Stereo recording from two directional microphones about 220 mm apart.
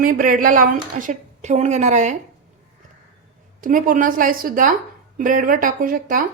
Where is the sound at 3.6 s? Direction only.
35° right (ahead or behind).